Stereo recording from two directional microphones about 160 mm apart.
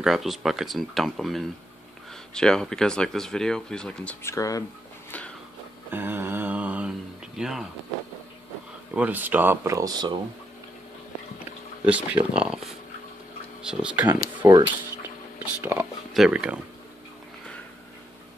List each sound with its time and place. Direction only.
0.0 s speech: centre (ahead or behind); by 4.6 s 20° left (ahead or behind)
5.9 s a sound: 15° right (ahead or behind)
8.9 s speech: 10° right (ahead or behind); by 10.1 s 25° right (ahead or behind)
11.8 s speech: 10° right (ahead or behind)
13.7 s speech: 10° right (ahead or behind)